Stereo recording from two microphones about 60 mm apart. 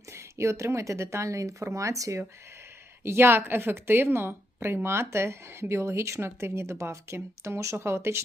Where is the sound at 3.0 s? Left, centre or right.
Right.